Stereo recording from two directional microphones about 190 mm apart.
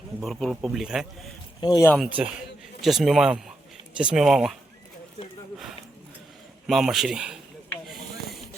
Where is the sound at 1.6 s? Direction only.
20° left (ahead or behind).